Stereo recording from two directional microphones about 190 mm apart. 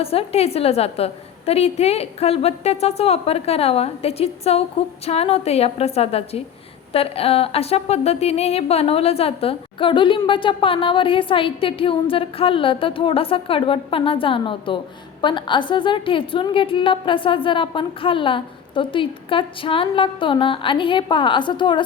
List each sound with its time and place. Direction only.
0.0 s a woman's voice: 30° left (ahead or behind)